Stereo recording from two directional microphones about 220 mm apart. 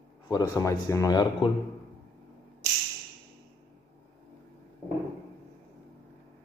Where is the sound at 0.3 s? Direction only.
15° left (ahead or behind).